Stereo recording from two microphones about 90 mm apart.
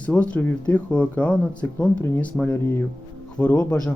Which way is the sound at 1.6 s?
25° left (ahead or behind).